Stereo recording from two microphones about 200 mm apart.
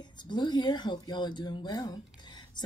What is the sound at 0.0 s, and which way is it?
Speech, 20° left (ahead or behind).